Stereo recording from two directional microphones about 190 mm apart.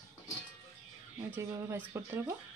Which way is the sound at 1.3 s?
15° right (ahead or behind).